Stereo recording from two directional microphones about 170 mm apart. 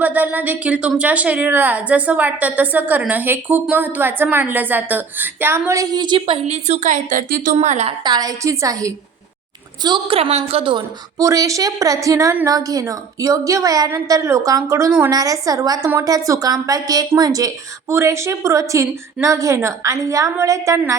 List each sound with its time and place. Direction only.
0.0 s speech: 10° right (ahead or behind); by 7.5 s 55° right (ahead or behind)
7.5 s a woman's voice: 40° right (ahead or behind)
8.0 s a woman's voice: 25° right (ahead or behind)